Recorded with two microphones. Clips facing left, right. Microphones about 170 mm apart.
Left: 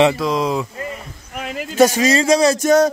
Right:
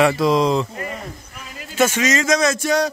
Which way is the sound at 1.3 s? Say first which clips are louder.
Left 11 dB; 75° left (ahead or behind).